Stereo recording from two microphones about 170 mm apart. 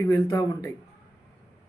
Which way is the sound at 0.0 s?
20° left (ahead or behind).